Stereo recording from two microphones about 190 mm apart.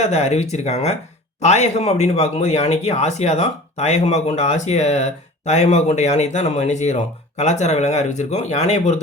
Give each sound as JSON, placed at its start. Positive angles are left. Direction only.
{"t": 0.0, "sound": "speech", "side_deg": 35}